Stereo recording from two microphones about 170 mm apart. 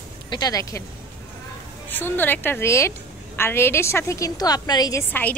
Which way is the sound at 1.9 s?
10° left (ahead or behind).